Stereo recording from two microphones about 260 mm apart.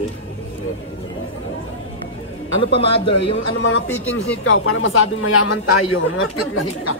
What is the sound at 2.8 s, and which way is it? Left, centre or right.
Speech, left.